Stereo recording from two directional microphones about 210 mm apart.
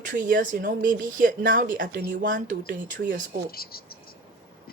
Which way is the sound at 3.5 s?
45° left (ahead or behind).